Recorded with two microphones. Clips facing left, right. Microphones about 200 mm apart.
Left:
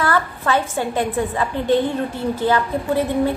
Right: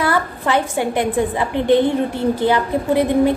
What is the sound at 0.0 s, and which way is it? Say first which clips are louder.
A woman's voice: right 1 dB; 15° right (ahead or behind).